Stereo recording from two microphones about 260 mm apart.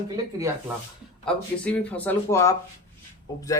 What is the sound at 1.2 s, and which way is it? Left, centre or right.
Speech, centre.